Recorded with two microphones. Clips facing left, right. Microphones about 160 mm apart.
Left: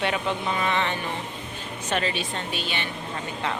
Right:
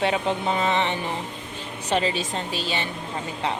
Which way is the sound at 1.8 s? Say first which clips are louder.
Right 3 dB; 25° right (ahead or behind).